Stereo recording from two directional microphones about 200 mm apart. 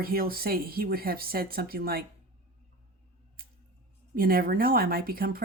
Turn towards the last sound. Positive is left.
turn(degrees=-45)  # may be behind; listen again after turning